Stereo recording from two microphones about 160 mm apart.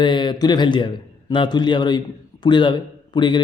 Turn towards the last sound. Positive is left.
turn(degrees=30)  # may be behind; listen again after turning